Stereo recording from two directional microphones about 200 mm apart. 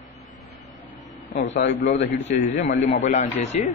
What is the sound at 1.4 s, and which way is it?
Speech, 65° left (ahead or behind).